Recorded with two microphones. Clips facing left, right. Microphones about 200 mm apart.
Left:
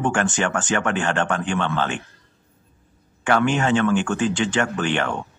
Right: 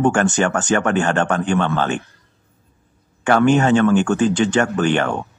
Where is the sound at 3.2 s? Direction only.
40° right (ahead or behind).